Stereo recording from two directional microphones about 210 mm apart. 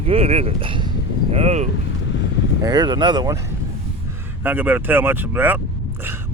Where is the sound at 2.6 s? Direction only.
20° right (ahead or behind).